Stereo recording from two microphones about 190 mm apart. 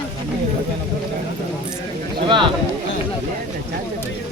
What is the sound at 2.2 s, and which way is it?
Speech, 25° right (ahead or behind).